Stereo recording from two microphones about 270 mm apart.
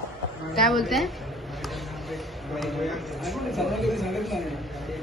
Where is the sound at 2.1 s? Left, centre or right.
Centre.